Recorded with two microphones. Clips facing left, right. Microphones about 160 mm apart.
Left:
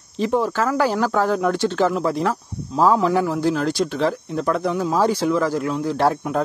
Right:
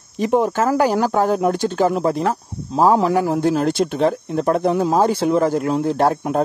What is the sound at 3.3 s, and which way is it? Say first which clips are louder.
Speech: right 3 dB; 55° right (ahead or behind).